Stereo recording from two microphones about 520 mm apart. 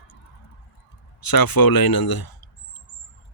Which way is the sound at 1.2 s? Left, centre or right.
Left.